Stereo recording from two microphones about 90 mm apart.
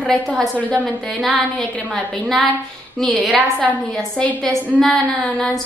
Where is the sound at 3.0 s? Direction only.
Centre (ahead or behind).